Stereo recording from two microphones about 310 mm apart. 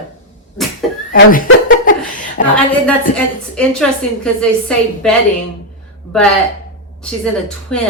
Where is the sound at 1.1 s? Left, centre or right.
Left.